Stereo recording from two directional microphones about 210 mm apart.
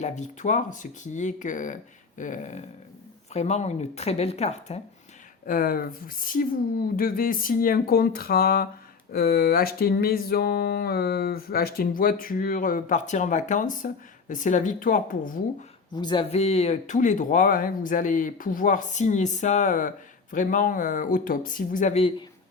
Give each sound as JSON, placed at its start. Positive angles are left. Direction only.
{"t": 0.0, "sound": "speech", "side_deg": 35}
{"t": 5.5, "sound": "a sound", "side_deg": 40}
{"t": 16.0, "sound": "speech", "side_deg": 20}